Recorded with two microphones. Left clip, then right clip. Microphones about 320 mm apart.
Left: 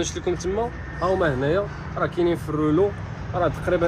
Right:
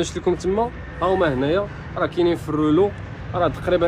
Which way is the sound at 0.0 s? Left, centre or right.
Right.